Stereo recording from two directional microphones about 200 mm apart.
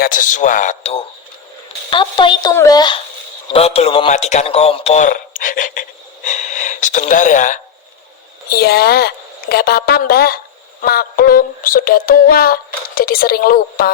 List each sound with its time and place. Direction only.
0.0 s a man's voice: 40° left (ahead or behind)
6.2 s gasp: 35° left (ahead or behind)
8.4 s a woman's voice: 50° left (ahead or behind)